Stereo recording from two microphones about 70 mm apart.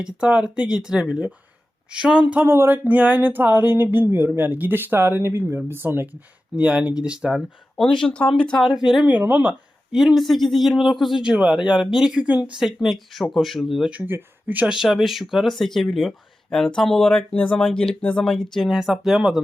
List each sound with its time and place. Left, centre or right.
0.0 s speech: centre
2.5 s a sound: right
4.0 s speech: right
6.6 s speech: centre
7.3 s speech: centre
8.6 s speech: centre
9.0 s a sound: right
9.9 s speech: centre
11.2 s speech: centre
12.5 s speech: centre
13.9 s a sound: right
14.7 s speech: centre
17.3 s speech: centre
18.7 s speech: centre